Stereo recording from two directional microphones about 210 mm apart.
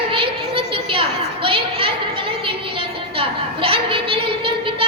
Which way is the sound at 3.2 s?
25° right (ahead or behind).